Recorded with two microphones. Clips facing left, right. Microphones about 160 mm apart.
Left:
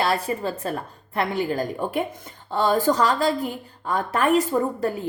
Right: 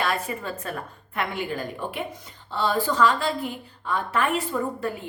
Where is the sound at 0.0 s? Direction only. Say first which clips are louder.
Left 4 dB; 35° left (ahead or behind).